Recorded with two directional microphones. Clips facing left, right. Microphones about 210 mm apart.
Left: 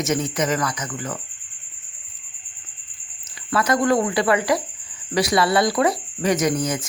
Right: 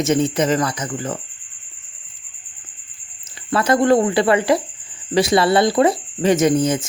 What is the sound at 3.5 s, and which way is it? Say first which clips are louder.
Speech: right 4 dB; 30° right (ahead or behind).